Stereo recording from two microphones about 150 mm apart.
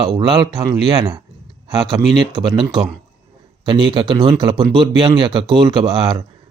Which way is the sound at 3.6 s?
35° right (ahead or behind).